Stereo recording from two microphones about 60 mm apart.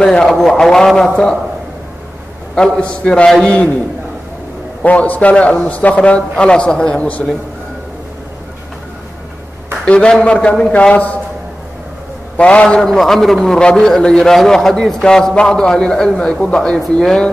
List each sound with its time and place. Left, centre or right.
0.0 s a man's voice: centre
2.5 s a man's voice: centre
4.8 s a man's voice: left
9.8 s a man's voice: centre
12.4 s a man's voice: left
12.6 s a man's voice: centre